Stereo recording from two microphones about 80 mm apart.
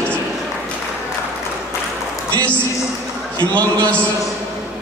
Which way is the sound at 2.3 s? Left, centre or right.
Centre.